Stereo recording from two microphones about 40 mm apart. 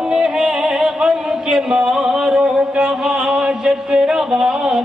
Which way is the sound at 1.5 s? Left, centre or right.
Centre.